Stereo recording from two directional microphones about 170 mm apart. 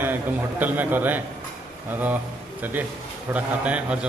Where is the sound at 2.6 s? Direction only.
10° right (ahead or behind).